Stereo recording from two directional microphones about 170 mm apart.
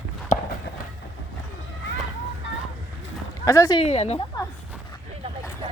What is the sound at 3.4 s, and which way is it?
Speech, 20° left (ahead or behind).